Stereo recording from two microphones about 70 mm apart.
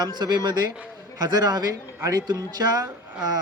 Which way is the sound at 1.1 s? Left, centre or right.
Right.